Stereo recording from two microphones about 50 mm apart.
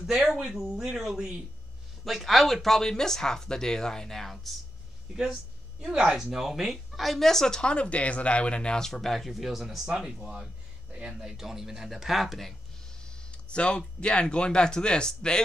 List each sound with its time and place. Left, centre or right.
0.0 s speech: centre
5.1 s speech: centre
9.8 s speech: centre
13.0 s speech: centre